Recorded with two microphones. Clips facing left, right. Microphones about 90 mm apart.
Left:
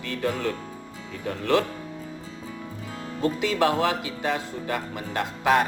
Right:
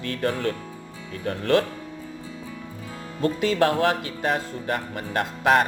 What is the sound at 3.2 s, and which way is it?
Speech, 50° right (ahead or behind).